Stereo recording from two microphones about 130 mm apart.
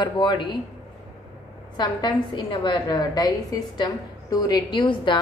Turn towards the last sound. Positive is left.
turn(degrees=40)  # may be behind; listen again after turning